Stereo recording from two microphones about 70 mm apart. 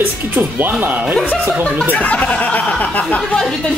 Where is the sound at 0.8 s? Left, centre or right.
Right.